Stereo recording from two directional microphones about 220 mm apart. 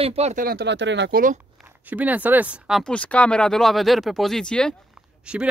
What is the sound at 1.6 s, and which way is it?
Speech, 5° right (ahead or behind).